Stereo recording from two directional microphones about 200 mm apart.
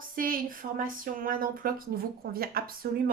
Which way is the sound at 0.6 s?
35° right (ahead or behind).